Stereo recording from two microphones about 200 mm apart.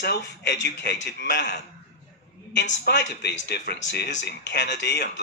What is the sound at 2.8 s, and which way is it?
Speech, 60° left (ahead or behind).